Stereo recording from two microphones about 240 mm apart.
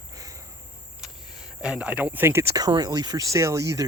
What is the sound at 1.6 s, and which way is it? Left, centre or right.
Speech, centre.